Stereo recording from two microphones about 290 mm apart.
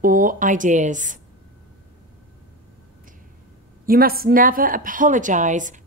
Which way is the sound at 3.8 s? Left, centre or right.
Right.